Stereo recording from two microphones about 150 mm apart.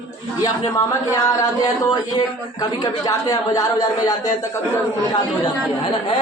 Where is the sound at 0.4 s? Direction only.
25° left (ahead or behind).